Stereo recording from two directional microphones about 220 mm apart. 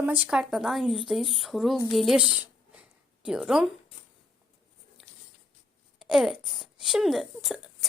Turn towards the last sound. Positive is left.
turn(degrees=0)  # may be behind; listen again after turning